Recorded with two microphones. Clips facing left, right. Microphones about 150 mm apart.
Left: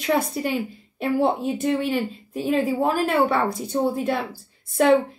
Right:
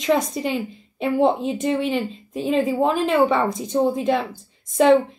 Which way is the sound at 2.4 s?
10° left (ahead or behind).